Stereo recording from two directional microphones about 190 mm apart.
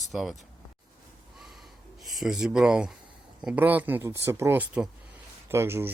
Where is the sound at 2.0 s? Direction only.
Centre (ahead or behind).